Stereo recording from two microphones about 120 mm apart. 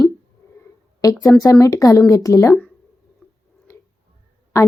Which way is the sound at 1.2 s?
30° left (ahead or behind).